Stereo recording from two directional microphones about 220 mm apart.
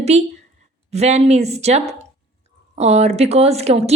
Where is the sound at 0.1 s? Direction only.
30° right (ahead or behind).